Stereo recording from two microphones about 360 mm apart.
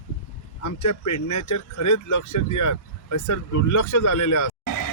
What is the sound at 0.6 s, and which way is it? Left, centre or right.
Speech, left.